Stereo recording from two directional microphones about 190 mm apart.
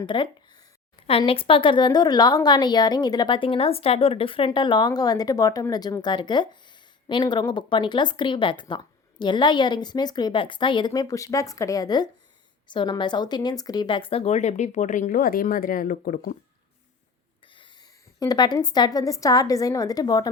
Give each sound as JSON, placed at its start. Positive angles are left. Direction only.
{"t": 0.0, "sound": "a woman's voice", "side_deg": 25}
{"t": 17.4, "sound": "speech", "side_deg": 25}